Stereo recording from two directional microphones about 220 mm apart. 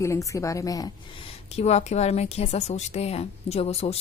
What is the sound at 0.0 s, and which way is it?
Speech, 15° left (ahead or behind).